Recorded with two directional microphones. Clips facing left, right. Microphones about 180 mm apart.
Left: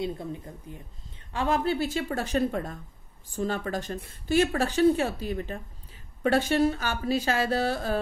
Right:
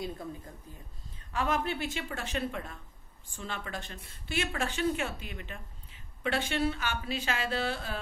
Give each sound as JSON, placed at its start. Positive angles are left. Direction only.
{"t": 0.0, "sound": "speech", "side_deg": 25}